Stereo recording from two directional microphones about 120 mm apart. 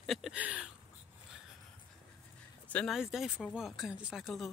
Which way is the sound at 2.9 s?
5° right (ahead or behind).